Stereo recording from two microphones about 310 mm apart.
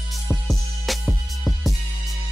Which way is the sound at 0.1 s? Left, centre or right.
Centre.